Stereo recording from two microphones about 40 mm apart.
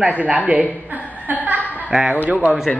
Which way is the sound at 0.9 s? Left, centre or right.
Right.